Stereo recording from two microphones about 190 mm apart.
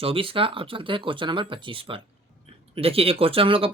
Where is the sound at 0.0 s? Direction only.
30° right (ahead or behind).